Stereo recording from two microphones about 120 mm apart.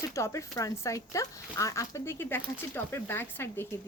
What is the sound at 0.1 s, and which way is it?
Speech, 25° left (ahead or behind).